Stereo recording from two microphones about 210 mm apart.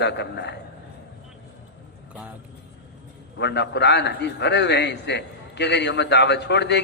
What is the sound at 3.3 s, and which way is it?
A man's voice, 55° left (ahead or behind).